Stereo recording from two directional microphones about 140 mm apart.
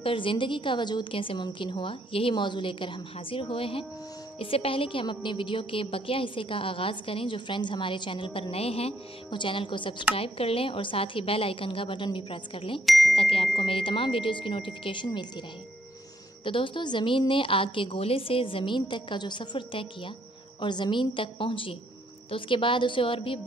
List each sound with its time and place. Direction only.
0.0 s a woman's voice: 40° left (ahead or behind)
12.8 s speech: centre (ahead or behind)
13.1 s a woman's voice: 40° left (ahead or behind)
16.4 s a woman's voice: 35° left (ahead or behind)